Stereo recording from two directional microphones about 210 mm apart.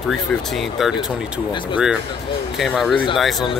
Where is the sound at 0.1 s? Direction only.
Centre (ahead or behind).